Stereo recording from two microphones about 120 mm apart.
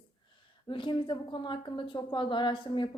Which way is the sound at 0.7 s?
45° left (ahead or behind).